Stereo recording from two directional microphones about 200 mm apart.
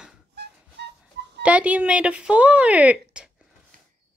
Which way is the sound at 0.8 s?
60° right (ahead or behind).